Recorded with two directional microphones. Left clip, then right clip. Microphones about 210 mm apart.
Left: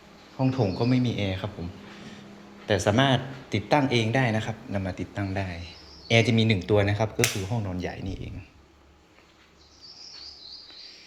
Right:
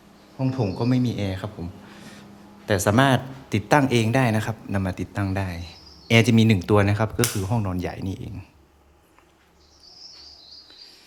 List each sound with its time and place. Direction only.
0.3 s speech: 20° right (ahead or behind)
2.6 s speech: 25° right (ahead or behind)